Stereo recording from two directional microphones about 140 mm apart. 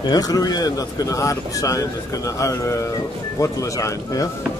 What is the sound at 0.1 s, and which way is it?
A man's voice, 25° left (ahead or behind).